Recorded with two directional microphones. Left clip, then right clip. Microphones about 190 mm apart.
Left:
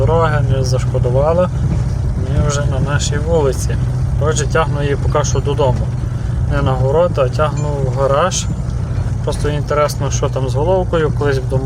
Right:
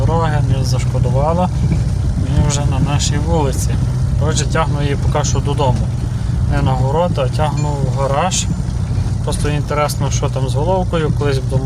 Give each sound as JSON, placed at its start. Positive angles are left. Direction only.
{"t": 0.1, "sound": "vehicle", "side_deg": 0}
{"t": 1.2, "sound": "speech", "side_deg": 0}
{"t": 2.5, "sound": "speech", "side_deg": -5}